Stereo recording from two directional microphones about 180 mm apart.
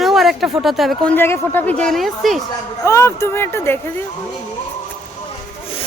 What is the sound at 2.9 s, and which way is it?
Speech, 15° left (ahead or behind).